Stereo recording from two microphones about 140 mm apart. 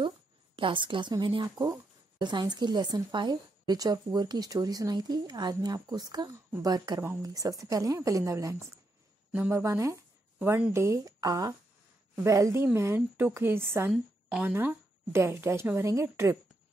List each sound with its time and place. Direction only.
0.6 s a woman's voice: 35° right (ahead or behind); by 13.9 s 15° right (ahead or behind)
13.9 s a woman's voice: 5° right (ahead or behind)
14.5 s a woman's voice: 15° right (ahead or behind)